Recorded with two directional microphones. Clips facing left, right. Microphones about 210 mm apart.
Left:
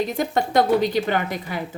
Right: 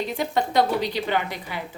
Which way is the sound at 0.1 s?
45° left (ahead or behind).